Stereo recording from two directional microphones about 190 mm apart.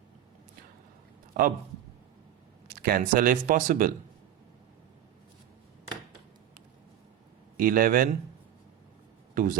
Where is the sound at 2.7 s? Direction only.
50° right (ahead or behind).